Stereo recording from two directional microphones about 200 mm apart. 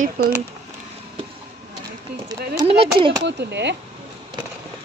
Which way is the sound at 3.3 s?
60° right (ahead or behind).